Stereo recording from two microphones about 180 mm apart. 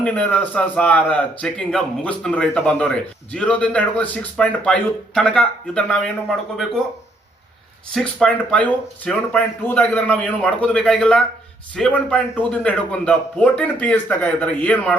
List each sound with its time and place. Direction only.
0.0 s a man's voice: 5° left (ahead or behind)
7.9 s a man's voice: 5° left (ahead or behind)